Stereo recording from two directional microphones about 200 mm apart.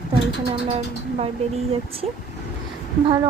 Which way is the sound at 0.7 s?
30° right (ahead or behind).